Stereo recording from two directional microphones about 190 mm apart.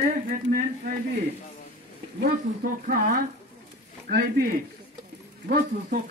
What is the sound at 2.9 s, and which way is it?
Speech, 45° right (ahead or behind).